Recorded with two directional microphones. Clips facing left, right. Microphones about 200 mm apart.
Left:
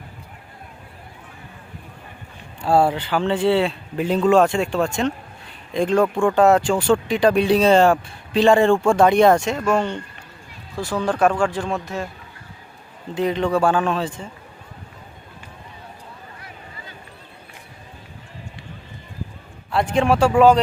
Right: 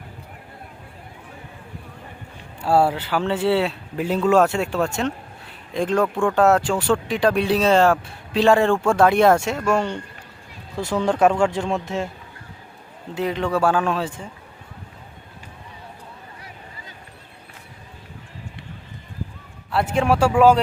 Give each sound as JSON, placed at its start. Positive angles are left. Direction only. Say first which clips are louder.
{"t": 2.6, "sound": "speech", "louder": "left 1 dB", "side_deg": -10}
{"t": 10.8, "sound": "a man's voice", "louder": "right 1 dB", "side_deg": -20}
{"t": 13.1, "sound": "speech", "louder": "left 2 dB", "side_deg": -5}
{"t": 19.7, "sound": "speech", "louder": "left 1 dB", "side_deg": -5}